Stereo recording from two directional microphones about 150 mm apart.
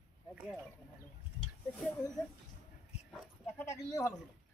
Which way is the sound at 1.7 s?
Centre (ahead or behind).